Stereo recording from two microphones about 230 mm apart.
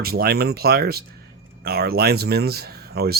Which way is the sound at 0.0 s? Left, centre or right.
Right.